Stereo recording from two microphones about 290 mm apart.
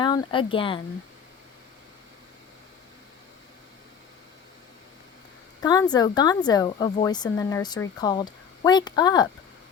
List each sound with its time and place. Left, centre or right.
0.0 s speech: centre
5.6 s speech: centre